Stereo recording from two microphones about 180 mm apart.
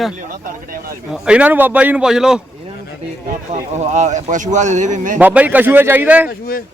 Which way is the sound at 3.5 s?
40° right (ahead or behind).